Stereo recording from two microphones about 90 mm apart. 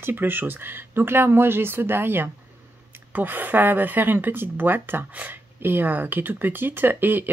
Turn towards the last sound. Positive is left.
turn(degrees=-20)  # may be behind; listen again after turning